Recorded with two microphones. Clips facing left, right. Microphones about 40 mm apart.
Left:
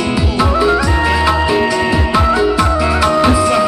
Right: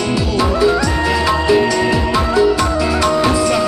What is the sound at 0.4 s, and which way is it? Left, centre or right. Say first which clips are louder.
Music: left 1 dB; centre.